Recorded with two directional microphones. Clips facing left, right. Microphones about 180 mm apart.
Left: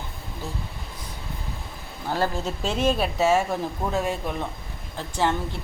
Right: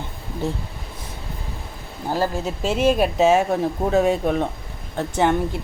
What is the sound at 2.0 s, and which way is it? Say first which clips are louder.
Speech: right 3 dB; 15° right (ahead or behind).